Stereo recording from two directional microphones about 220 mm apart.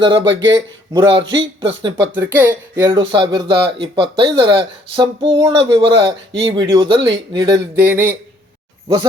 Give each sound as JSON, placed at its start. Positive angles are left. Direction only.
{"t": 0.0, "sound": "speech", "side_deg": -20}
{"t": 0.3, "sound": "speech", "side_deg": -55}
{"t": 0.5, "sound": "speech", "side_deg": -20}
{"t": 2.1, "sound": "speech", "side_deg": -10}